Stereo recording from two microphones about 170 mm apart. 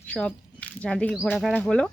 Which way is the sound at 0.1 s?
5° left (ahead or behind).